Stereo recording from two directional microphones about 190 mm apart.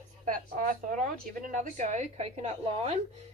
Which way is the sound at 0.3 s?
45° right (ahead or behind).